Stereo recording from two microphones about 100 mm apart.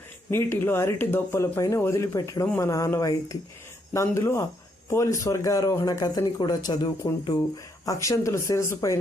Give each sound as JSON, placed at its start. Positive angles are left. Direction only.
{"t": 0.3, "sound": "speech", "side_deg": 25}